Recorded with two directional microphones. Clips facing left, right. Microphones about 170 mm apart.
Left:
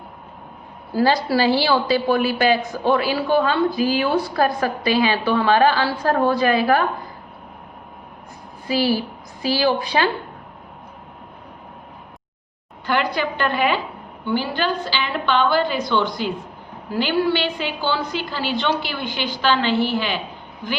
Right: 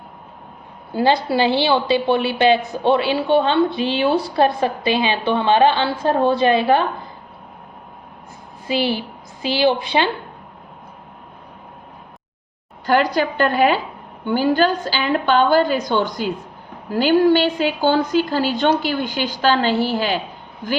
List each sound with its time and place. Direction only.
0.9 s a woman's voice: 25° right (ahead or behind)
8.6 s a woman's voice: 25° right (ahead or behind)
12.8 s a woman's voice: 40° right (ahead or behind)